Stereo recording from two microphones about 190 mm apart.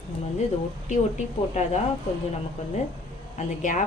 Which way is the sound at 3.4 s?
40° left (ahead or behind).